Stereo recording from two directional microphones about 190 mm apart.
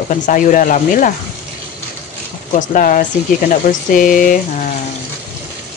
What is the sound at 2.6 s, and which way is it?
Speech, 45° left (ahead or behind).